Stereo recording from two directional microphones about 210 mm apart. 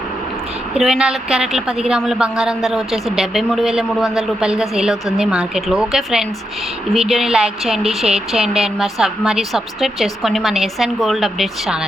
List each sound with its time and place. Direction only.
0.7 s a woman's voice: 5° right (ahead or behind)